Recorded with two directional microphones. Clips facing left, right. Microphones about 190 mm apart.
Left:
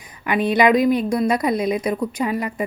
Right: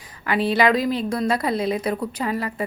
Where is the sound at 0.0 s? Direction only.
15° left (ahead or behind).